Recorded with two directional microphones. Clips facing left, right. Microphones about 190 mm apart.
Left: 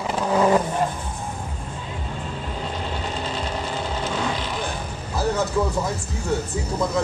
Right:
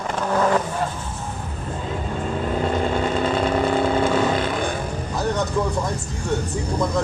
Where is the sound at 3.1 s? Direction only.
55° right (ahead or behind).